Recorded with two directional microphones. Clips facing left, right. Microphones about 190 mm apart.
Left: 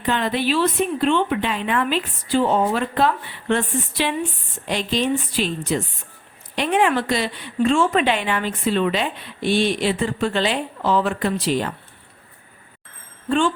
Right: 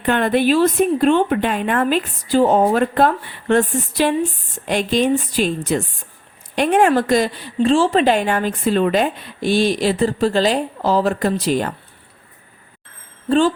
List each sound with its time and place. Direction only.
0.0 s a woman's voice: 55° right (ahead or behind)